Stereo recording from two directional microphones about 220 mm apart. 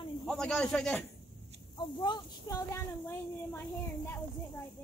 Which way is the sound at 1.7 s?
20° left (ahead or behind).